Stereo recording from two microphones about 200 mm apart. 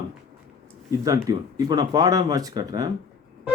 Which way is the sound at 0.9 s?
15° right (ahead or behind).